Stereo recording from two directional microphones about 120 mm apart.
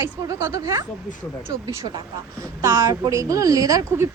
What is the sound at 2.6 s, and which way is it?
A woman's voice, 25° right (ahead or behind).